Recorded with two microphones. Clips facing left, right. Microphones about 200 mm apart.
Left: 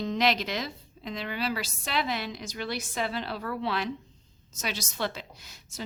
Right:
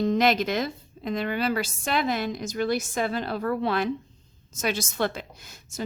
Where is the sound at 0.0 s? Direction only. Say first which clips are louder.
Right 5 dB; 50° right (ahead or behind).